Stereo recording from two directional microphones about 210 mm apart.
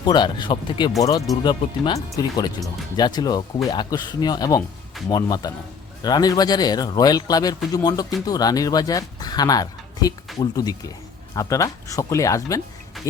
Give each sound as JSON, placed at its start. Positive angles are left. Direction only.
{"t": 0.0, "sound": "speech", "side_deg": 20}